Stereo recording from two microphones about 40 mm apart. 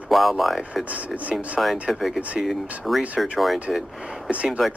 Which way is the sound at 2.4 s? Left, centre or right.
Centre.